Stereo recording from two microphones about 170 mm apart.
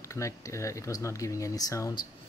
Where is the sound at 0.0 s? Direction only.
15° left (ahead or behind).